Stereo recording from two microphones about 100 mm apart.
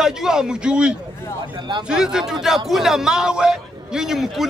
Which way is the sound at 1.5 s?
50° right (ahead or behind).